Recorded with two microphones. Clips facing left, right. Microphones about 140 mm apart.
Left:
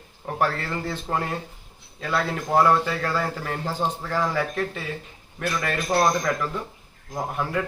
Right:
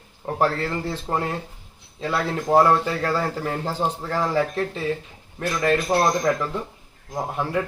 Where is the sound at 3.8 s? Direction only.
10° right (ahead or behind).